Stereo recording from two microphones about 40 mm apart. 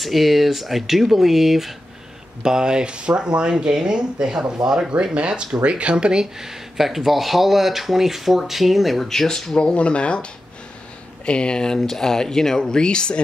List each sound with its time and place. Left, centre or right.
0.0 s speech: centre
2.4 s speech: centre
6.3 s speech: centre
9.1 s speech: centre
9.6 s speech: left
11.2 s speech: left